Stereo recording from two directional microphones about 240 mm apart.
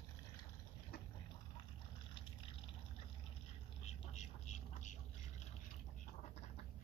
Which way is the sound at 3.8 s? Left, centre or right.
Left.